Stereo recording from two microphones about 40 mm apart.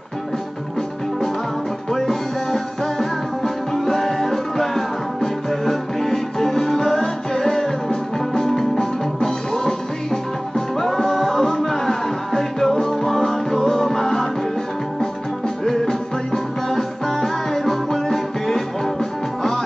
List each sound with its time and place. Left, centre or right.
1.9 s music: centre
15.6 s music: centre